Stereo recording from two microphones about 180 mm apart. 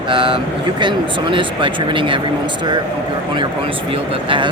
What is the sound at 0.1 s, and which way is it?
Speech, 25° right (ahead or behind).